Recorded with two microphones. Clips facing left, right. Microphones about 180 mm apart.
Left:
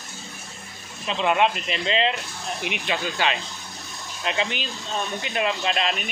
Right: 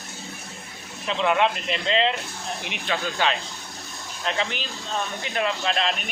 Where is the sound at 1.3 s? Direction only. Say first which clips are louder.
Left 1 dB; 15° left (ahead or behind).